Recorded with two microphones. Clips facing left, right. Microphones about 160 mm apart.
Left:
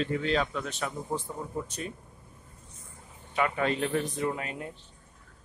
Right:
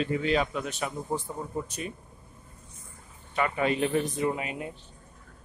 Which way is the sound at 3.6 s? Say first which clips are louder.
Right 2 dB; 10° right (ahead or behind).